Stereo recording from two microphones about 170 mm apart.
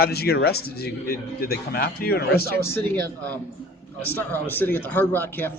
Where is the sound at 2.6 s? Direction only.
10° left (ahead or behind).